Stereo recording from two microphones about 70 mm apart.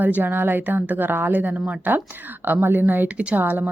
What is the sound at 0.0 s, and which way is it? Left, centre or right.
A woman's voice, right.